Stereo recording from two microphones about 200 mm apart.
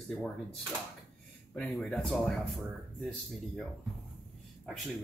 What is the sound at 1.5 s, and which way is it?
Speech, 5° left (ahead or behind).